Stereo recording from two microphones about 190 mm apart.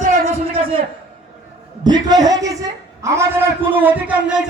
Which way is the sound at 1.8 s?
20° right (ahead or behind).